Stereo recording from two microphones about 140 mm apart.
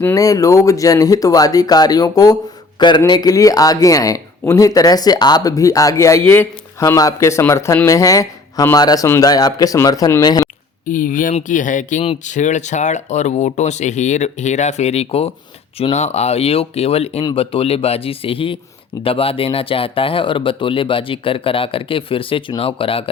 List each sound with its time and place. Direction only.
0.0 s speech: 25° left (ahead or behind)
10.8 s speech: 70° left (ahead or behind); by 23.0 s 40° left (ahead or behind)